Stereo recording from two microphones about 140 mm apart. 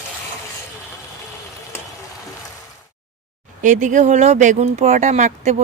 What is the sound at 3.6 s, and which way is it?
Speech, 65° right (ahead or behind).